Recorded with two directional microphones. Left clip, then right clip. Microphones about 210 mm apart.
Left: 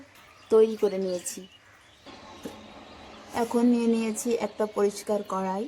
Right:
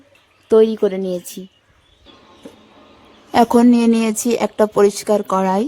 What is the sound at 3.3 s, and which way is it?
A woman's voice, 50° right (ahead or behind).